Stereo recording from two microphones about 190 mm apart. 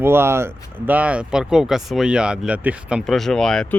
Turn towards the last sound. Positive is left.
turn(degrees=5)  # may be behind; listen again after turning